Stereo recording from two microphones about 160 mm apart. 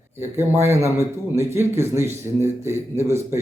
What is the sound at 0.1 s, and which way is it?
A man's voice, 15° right (ahead or behind).